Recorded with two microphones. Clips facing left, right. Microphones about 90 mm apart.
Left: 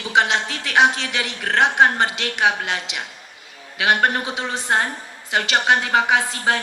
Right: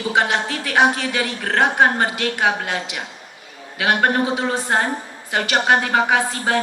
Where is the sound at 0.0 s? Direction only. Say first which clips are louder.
Even; 20° left (ahead or behind).